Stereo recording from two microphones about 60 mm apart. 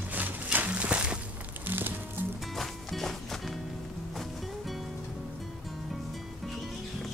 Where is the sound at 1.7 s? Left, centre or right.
Right.